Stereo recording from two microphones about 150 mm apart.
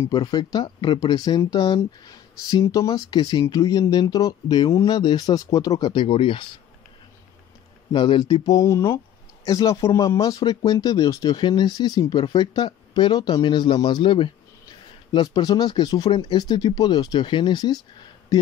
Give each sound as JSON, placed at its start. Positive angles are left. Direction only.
{"t": 0.0, "sound": "speech", "side_deg": 30}
{"t": 7.9, "sound": "speech", "side_deg": 30}